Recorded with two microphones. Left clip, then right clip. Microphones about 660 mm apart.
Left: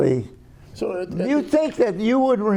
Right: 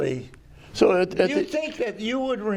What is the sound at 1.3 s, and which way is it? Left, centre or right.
Speech, left.